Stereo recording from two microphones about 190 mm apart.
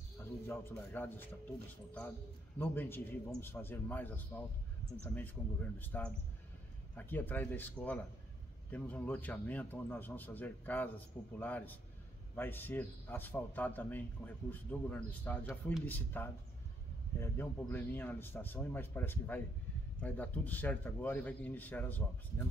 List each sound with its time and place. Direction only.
0.2 s a man's voice: 10° left (ahead or behind)
2.6 s a man's voice: 10° left (ahead or behind)